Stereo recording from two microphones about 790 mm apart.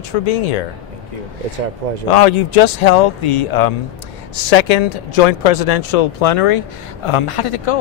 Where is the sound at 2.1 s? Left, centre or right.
Left.